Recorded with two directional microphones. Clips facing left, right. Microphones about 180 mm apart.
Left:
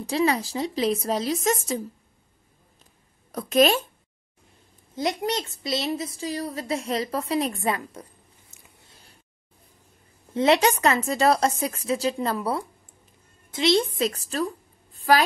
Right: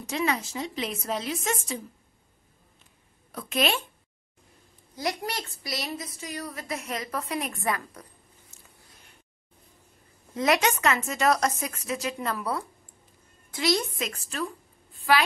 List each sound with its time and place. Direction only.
0.0 s a woman's voice: 35° left (ahead or behind)
3.3 s a woman's voice: 40° left (ahead or behind)
4.9 s a child's voice: 20° left (ahead or behind)
10.3 s a woman's voice: 30° left (ahead or behind)